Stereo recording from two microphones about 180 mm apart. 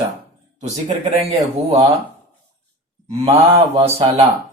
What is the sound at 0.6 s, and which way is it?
Speech, 35° right (ahead or behind).